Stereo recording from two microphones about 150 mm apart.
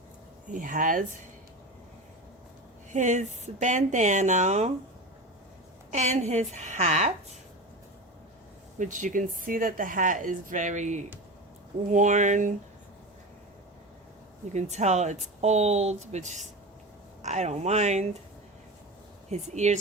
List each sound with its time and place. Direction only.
0.4 s speech: 60° right (ahead or behind)
2.9 s speech: 55° right (ahead or behind)
5.9 s speech: 50° right (ahead or behind)
8.8 s speech: 60° right (ahead or behind)
14.5 s speech: 50° right (ahead or behind)
19.3 s speech: 50° right (ahead or behind)